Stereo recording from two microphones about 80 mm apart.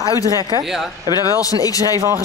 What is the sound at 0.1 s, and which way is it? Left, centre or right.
Speech, left.